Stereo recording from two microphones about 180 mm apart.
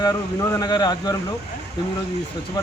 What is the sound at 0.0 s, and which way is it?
Speech, 20° left (ahead or behind).